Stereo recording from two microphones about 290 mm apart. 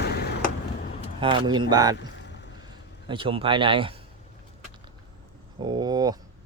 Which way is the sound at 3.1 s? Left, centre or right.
Centre.